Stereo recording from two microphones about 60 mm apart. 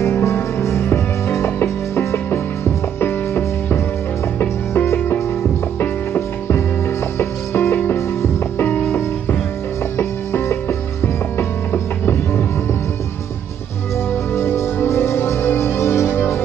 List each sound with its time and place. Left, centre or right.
0.0 s music: left
9.9 s music: left
14.3 s music: left